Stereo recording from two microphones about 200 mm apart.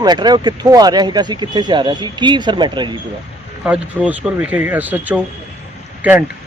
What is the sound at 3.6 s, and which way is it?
Speech, 5° right (ahead or behind).